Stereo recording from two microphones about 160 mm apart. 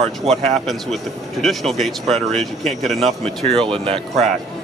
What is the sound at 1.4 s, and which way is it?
Speech, centre (ahead or behind).